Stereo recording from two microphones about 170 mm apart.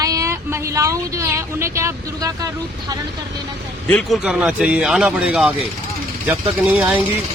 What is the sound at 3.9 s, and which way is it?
Speech, 5° left (ahead or behind).